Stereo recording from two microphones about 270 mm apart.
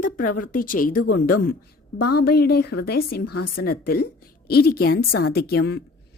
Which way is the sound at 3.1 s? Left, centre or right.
Left.